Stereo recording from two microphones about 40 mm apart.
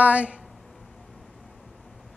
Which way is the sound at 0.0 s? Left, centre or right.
Right.